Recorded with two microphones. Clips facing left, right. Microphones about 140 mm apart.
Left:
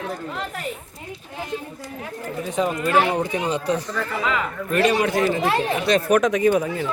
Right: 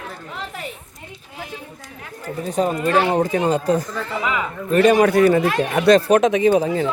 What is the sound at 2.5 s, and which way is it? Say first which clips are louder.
Speech: right 3 dB; 35° right (ahead or behind).